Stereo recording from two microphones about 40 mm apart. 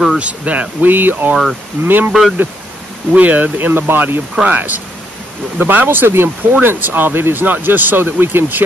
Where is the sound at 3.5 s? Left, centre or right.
Right.